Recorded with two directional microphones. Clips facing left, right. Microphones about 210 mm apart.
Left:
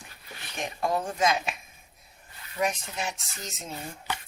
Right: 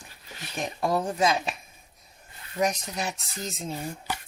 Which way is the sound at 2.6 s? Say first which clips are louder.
Right 2 dB; 40° right (ahead or behind).